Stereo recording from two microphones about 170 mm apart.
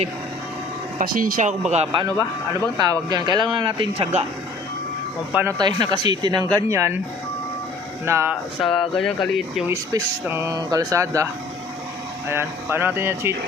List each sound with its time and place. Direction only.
0.9 s speech: 55° right (ahead or behind)
1.7 s speech: 35° right (ahead or behind)
5.3 s speech: 10° right (ahead or behind)
5.5 s speech: 25° right (ahead or behind)
8.0 s speech: 15° right (ahead or behind)
8.6 s speech: centre (ahead or behind)
9.6 s speech: 15° right (ahead or behind)
12.3 s speech: 15° right (ahead or behind)